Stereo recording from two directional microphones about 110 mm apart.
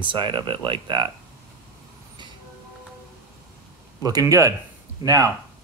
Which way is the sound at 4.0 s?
35° right (ahead or behind).